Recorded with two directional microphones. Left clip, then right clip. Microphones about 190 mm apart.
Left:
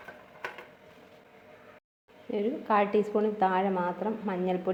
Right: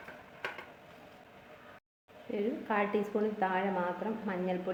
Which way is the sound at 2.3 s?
35° left (ahead or behind).